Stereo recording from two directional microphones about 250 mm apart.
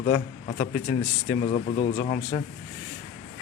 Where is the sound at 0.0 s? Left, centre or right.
Left.